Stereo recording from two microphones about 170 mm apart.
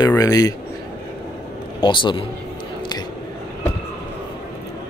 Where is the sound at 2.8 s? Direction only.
25° left (ahead or behind).